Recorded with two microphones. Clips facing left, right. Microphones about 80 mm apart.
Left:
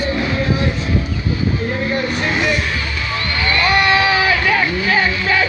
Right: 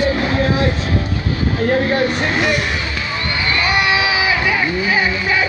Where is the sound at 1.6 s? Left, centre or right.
Right.